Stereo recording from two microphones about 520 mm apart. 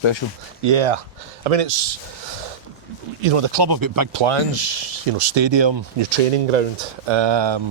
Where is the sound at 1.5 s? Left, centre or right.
Right.